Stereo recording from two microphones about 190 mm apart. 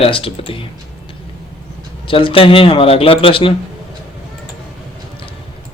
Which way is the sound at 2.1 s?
30° left (ahead or behind).